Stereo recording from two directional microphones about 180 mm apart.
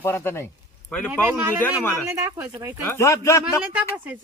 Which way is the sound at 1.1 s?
15° right (ahead or behind).